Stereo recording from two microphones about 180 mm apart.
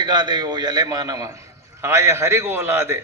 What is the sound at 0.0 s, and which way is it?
A man's voice, 25° right (ahead or behind).